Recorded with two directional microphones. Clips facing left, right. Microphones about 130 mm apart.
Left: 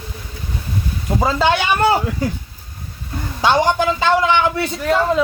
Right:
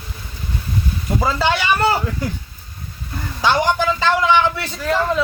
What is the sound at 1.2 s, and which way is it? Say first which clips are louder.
Speech: left 3 dB; 20° left (ahead or behind).